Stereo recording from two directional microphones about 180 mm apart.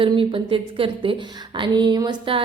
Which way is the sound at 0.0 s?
30° right (ahead or behind).